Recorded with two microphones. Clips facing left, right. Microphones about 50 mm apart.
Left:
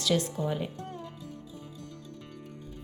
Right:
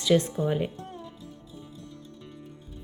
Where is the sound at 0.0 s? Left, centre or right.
Right.